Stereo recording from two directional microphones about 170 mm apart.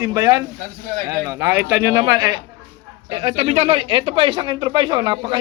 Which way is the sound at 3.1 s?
35° right (ahead or behind).